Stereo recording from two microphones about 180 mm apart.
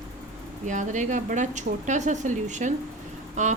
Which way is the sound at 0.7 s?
45° right (ahead or behind).